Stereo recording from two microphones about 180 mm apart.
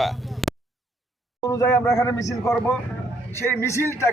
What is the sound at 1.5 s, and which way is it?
A man's voice, 15° left (ahead or behind).